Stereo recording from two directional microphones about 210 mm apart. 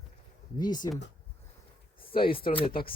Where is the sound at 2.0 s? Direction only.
25° left (ahead or behind).